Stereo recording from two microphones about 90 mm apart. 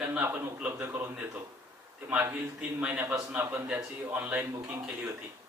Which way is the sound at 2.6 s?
15° right (ahead or behind).